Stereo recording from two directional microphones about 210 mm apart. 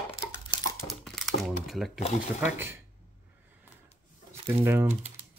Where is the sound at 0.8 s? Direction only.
Centre (ahead or behind).